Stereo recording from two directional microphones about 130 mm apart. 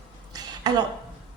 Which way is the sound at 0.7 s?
30° right (ahead or behind).